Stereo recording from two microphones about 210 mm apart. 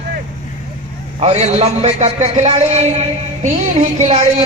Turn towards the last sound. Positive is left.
turn(degrees=-35)  # may be behind; listen again after turning